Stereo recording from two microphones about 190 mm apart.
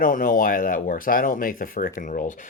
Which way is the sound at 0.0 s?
45° left (ahead or behind).